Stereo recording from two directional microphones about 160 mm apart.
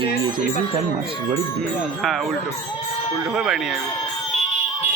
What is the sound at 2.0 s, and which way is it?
A man's voice, centre (ahead or behind).